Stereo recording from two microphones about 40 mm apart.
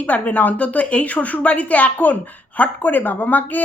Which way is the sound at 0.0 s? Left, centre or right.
Left.